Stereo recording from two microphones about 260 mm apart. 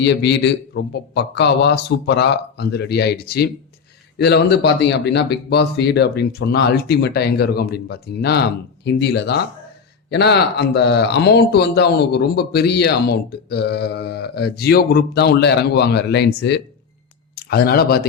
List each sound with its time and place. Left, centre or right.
0.0 s speech: left